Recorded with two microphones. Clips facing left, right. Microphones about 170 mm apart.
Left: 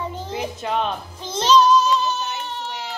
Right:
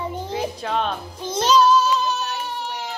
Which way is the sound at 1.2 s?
10° right (ahead or behind).